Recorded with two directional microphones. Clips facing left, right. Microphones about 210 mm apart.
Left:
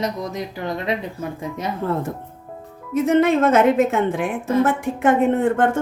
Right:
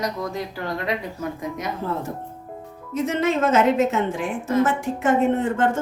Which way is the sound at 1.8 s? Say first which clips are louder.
Left 4 dB; 60° left (ahead or behind).